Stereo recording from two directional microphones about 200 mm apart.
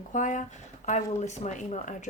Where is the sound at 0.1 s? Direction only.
40° left (ahead or behind).